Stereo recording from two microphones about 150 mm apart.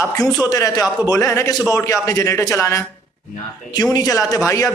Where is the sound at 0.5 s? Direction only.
25° left (ahead or behind).